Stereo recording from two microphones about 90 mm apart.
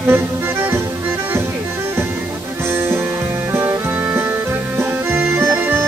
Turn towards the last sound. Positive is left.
turn(degrees=-25)  # may be behind; listen again after turning